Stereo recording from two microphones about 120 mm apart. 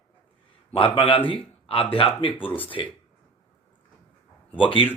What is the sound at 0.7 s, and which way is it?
Speech, 45° left (ahead or behind).